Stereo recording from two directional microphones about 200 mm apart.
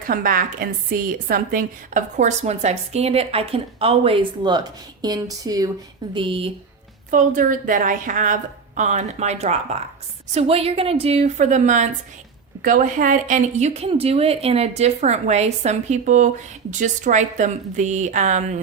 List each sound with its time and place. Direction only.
0.1 s a woman's voice: 45° right (ahead or behind); by 6.5 s 25° right (ahead or behind)
7.1 s a woman's voice: 40° right (ahead or behind)